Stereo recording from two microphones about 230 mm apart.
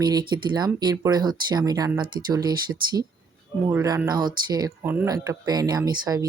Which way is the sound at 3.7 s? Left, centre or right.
Centre.